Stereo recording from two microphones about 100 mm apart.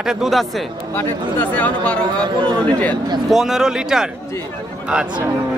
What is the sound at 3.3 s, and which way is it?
A man's voice, 5° right (ahead or behind).